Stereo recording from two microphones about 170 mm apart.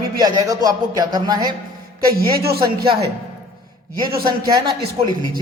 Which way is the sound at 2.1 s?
65° right (ahead or behind).